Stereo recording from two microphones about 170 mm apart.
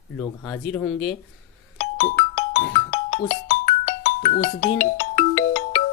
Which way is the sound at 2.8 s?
45° left (ahead or behind).